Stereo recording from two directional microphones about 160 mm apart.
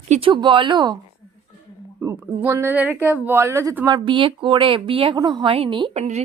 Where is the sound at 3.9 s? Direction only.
30° right (ahead or behind).